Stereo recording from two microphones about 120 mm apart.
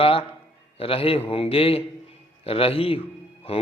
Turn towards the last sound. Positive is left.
turn(degrees=55)  # may be behind; listen again after turning